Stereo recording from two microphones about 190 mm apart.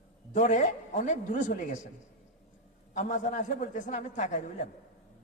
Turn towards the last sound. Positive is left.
turn(degrees=35)  # may be behind; listen again after turning